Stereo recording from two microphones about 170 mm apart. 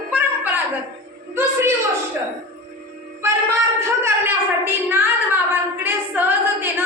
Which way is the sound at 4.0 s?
15° right (ahead or behind).